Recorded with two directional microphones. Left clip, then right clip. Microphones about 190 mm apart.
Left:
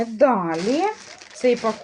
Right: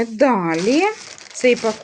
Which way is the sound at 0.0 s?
40° right (ahead or behind).